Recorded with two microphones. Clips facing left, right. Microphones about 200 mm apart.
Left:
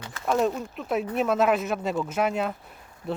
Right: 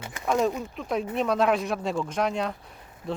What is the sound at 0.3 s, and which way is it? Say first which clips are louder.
Speech: even; centre (ahead or behind).